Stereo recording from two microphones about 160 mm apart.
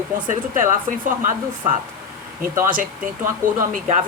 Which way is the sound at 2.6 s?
60° right (ahead or behind).